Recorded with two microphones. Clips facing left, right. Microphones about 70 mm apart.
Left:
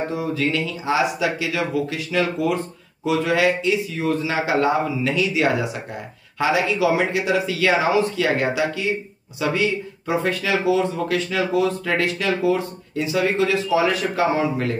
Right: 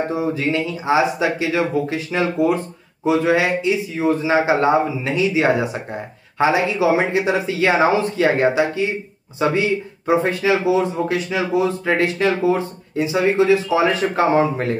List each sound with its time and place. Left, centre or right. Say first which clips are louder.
0.1 s speech: right 2 dB; right